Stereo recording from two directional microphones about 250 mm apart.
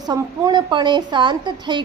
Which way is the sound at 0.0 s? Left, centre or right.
Centre.